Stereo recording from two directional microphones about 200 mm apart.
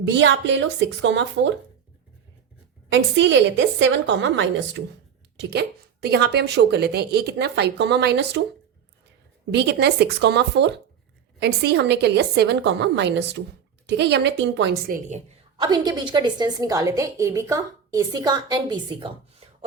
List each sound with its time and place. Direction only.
0.1 s speech: 65° right (ahead or behind)
2.9 s speech: 65° right (ahead or behind)
9.5 s speech: 60° right (ahead or behind)
15.5 s a woman's voice: 20° right (ahead or behind)